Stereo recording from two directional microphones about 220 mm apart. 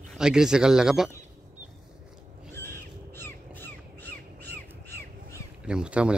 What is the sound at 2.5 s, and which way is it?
Crow, 10° left (ahead or behind).